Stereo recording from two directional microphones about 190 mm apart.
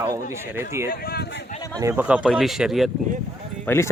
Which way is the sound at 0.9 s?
50° left (ahead or behind).